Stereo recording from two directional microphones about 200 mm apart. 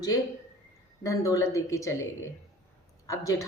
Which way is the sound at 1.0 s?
15° left (ahead or behind).